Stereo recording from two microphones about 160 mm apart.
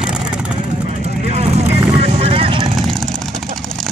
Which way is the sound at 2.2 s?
35° right (ahead or behind).